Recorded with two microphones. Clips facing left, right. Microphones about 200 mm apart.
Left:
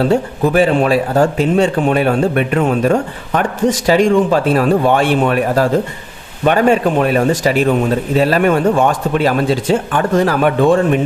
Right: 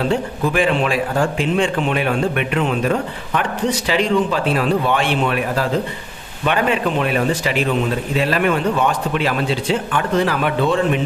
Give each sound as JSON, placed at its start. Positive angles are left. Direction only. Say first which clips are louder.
{"t": 0.0, "sound": "a man's voice", "louder": "left 5 dB", "side_deg": 40}